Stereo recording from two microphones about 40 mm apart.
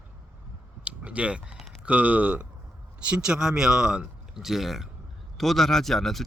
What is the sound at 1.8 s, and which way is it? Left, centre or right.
Speech, right.